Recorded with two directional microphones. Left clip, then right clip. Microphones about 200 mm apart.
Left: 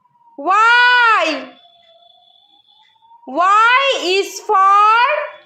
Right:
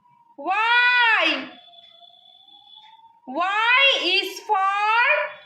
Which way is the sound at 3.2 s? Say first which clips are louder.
Left 9 dB; 30° left (ahead or behind).